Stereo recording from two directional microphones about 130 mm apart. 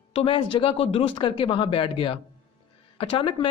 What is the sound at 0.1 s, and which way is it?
A woman's voice, 45° left (ahead or behind).